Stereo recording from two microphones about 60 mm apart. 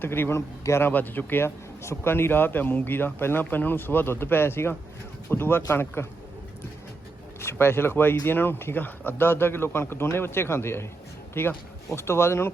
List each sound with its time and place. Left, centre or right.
0.0 s speech: left
0.3 s a man's voice: left
0.8 s speech: left
7.4 s speech: left